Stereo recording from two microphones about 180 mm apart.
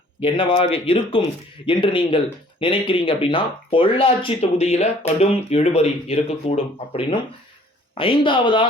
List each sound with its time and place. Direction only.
0.2 s speech: 30° left (ahead or behind)